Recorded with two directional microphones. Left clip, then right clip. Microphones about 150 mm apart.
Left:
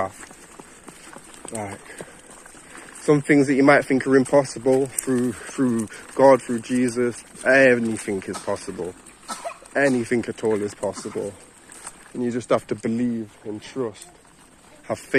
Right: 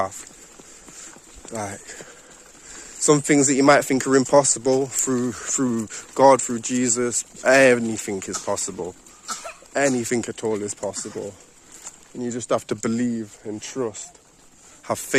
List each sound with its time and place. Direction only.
3.1 s speech: 40° right (ahead or behind)
5.6 s speech: 25° right (ahead or behind)
6.1 s speech: 40° right (ahead or behind)
8.8 s a sound: 75° right (ahead or behind)
9.7 s speech: 30° right (ahead or behind)
12.8 s speech: 65° right (ahead or behind)
13.5 s speech: 75° right (ahead or behind)